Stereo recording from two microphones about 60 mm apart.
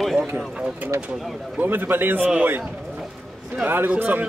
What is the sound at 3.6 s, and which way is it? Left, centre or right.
Speech, right.